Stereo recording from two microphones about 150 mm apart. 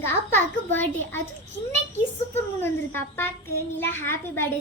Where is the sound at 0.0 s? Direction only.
15° left (ahead or behind).